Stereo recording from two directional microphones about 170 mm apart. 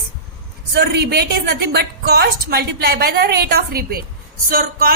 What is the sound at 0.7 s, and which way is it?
A woman's voice, 70° right (ahead or behind).